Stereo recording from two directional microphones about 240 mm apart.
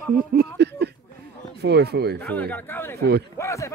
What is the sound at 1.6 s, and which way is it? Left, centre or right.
Speech, right.